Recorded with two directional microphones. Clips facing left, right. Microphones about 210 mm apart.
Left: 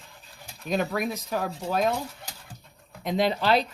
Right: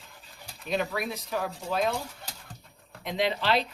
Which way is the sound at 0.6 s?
45° left (ahead or behind).